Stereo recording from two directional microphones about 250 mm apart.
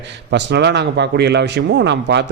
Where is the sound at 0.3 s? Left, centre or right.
Right.